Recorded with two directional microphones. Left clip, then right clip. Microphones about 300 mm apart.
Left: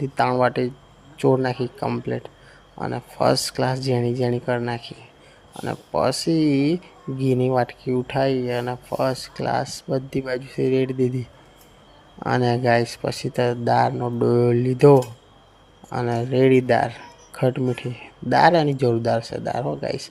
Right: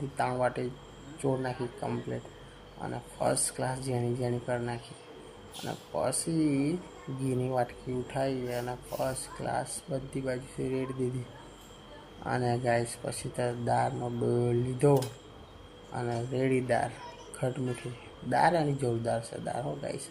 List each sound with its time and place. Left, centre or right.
0.2 s speech: left
12.2 s speech: left